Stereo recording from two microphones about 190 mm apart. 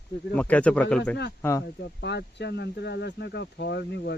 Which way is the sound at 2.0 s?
65° left (ahead or behind).